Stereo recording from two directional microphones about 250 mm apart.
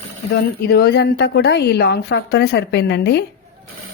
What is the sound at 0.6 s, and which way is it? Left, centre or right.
A woman's voice, left.